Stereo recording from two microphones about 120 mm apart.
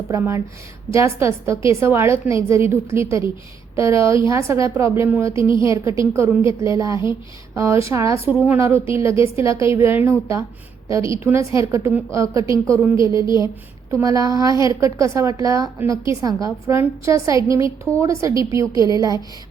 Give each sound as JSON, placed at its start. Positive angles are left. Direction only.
{"t": 0.1, "sound": "a woman's voice", "side_deg": -25}
{"t": 8.3, "sound": "a woman's voice", "side_deg": -15}